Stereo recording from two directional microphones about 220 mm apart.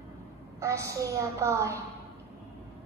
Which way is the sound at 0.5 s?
15° right (ahead or behind).